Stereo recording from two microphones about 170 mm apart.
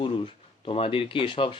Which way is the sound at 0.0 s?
30° left (ahead or behind).